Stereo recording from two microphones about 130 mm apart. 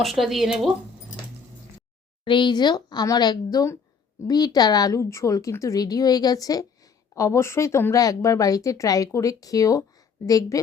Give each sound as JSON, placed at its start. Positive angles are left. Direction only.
{"t": 0.0, "sound": "speech", "side_deg": 0}
{"t": 2.2, "sound": "speech", "side_deg": 40}